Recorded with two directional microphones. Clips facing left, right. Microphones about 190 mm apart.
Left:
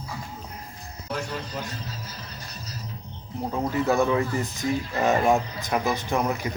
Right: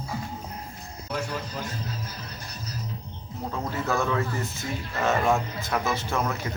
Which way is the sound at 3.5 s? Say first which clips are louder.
Left 5 dB; 20° left (ahead or behind).